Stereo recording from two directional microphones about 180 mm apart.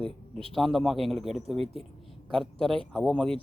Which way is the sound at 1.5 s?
35° right (ahead or behind).